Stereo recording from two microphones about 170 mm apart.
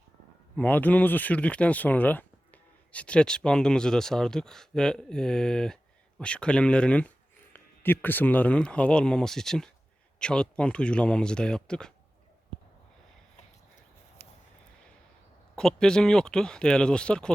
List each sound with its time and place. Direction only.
0.5 s speech: 10° left (ahead or behind)
14.2 s vehicle: 40° left (ahead or behind)
15.5 s speech: 5° left (ahead or behind)